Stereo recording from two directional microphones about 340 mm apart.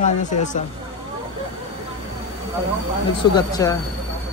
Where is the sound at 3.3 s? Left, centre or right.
Centre.